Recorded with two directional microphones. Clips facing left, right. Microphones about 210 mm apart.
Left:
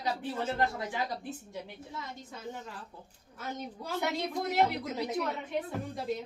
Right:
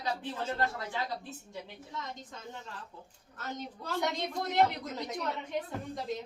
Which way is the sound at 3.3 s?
10° left (ahead or behind).